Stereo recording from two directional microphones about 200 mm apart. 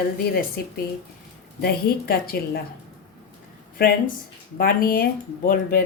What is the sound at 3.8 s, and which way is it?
Speech, 45° left (ahead or behind).